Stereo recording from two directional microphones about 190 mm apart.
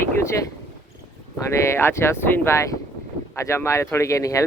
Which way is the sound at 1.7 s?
15° left (ahead or behind).